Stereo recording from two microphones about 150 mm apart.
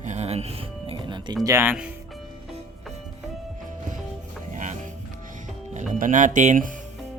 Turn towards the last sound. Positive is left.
turn(degrees=-60)  # may be behind; listen again after turning